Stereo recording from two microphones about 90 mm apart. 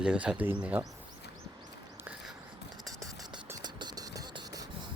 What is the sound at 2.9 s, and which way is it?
Music, 40° right (ahead or behind).